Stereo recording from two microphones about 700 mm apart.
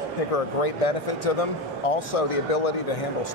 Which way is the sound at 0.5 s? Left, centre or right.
Left.